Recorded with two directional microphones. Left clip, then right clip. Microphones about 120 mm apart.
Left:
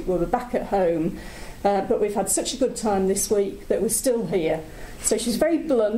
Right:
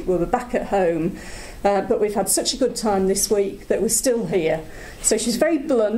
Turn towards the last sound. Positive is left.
turn(degrees=-35)  # may be behind; listen again after turning